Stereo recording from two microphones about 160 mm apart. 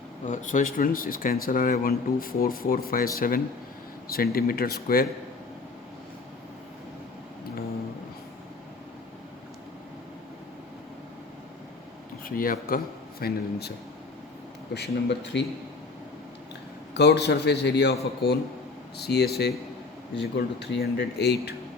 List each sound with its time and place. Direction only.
0.3 s speech: 50° left (ahead or behind)
12.2 s speech: 65° left (ahead or behind); by 13.7 s 80° left
14.7 s speech: 90° left
16.9 s speech: 90° left
18.9 s speech: 90° left